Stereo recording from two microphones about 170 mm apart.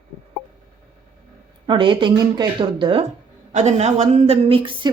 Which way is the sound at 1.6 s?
30° right (ahead or behind).